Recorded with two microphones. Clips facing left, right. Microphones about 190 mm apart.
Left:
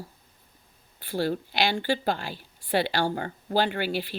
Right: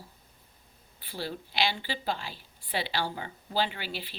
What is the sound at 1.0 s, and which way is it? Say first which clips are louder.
A woman's voice: left 10 dB; 50° left (ahead or behind).